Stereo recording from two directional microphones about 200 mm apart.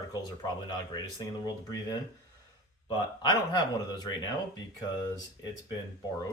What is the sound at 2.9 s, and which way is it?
Speech, 20° left (ahead or behind).